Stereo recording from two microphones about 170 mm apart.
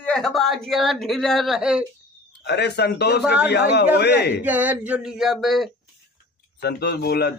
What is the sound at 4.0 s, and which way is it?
Speech, 75° left (ahead or behind).